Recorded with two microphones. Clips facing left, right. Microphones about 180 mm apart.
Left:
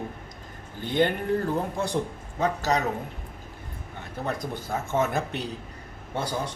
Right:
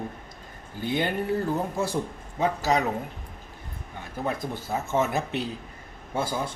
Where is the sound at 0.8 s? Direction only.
10° right (ahead or behind).